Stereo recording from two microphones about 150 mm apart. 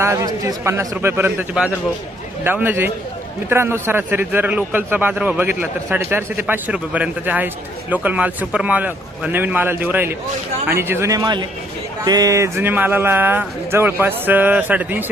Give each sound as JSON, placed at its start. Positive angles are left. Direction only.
{"t": 0.0, "sound": "a man's voice", "side_deg": -20}